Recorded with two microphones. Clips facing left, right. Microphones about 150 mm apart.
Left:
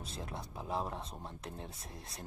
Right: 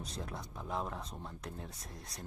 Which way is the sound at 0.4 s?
30° left (ahead or behind).